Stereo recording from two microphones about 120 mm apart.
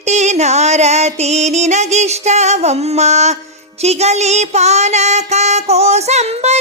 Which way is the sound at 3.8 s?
65° right (ahead or behind).